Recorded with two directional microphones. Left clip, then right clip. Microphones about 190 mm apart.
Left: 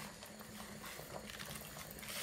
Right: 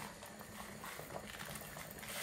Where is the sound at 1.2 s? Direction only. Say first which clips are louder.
Right 1 dB; 5° right (ahead or behind).